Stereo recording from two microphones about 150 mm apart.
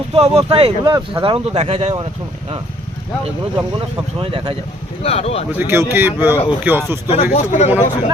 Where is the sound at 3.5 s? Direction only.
35° right (ahead or behind).